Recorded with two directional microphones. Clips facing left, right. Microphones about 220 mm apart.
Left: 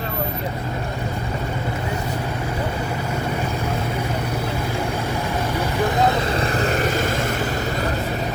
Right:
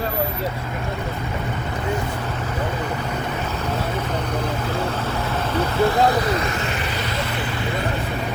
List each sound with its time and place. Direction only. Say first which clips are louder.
5.5 s vehicle: right 4 dB; 15° left (ahead or behind)
6.3 s vehicle: left 3 dB; 35° left (ahead or behind)